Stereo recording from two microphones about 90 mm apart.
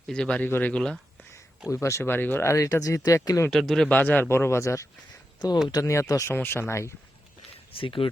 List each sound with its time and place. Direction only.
0.1 s speech: 10° left (ahead or behind)
0.4 s speech: 20° left (ahead or behind)
0.7 s speech: 5° left (ahead or behind)
1.7 s speech: 30° left (ahead or behind)
3.5 s speech: 5° left (ahead or behind)
3.8 s speech: 15° left (ahead or behind); by 6.3 s 35° left (ahead or behind)
6.3 s speech: 25° left (ahead or behind)
7.8 s speech: 80° left